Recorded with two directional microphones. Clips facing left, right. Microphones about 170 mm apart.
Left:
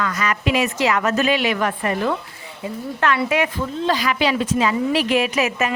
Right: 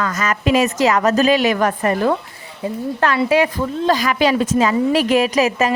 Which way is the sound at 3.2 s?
30° right (ahead or behind).